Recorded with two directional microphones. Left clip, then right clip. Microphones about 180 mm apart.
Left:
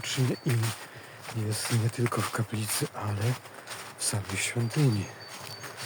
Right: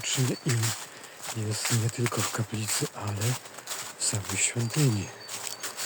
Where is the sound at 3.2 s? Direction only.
25° right (ahead or behind).